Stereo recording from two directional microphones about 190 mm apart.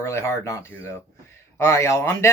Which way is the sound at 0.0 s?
15° left (ahead or behind).